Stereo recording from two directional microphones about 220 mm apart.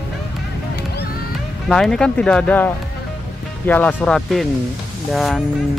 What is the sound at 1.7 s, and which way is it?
Speech, centre (ahead or behind).